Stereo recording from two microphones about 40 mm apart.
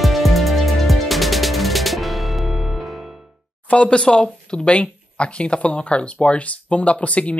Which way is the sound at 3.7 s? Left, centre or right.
Left.